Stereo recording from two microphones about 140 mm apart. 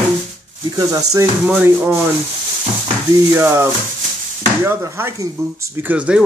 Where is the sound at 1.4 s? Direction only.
15° right (ahead or behind).